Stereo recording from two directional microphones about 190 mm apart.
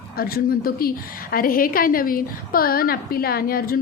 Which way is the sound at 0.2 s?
50° left (ahead or behind).